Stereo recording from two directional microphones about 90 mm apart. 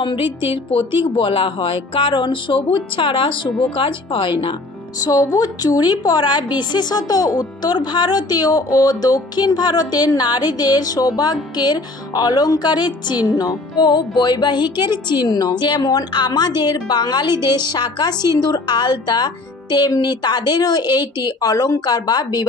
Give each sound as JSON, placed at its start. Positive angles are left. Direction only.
{"t": 0.0, "sound": "speech", "side_deg": 70}
{"t": 4.9, "sound": "a woman's voice", "side_deg": 45}